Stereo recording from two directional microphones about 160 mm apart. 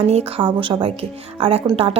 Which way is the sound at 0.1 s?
35° right (ahead or behind).